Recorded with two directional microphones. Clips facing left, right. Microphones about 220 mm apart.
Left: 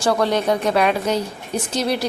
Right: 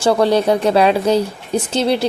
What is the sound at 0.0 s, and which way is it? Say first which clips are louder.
A woman's voice: right 5 dB; 30° right (ahead or behind).